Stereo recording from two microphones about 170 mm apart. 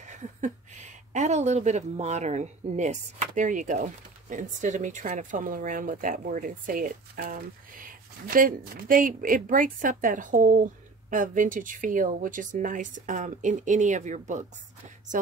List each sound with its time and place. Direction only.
0.0 s speech: 45° right (ahead or behind)